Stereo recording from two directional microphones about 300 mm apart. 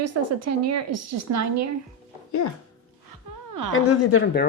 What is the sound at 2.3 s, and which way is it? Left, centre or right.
Speech, left.